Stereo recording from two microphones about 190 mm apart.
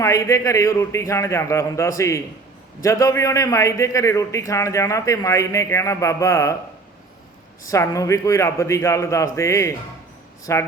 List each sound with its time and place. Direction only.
0.0 s a man's voice: 15° left (ahead or behind)
7.6 s a man's voice: 15° left (ahead or behind)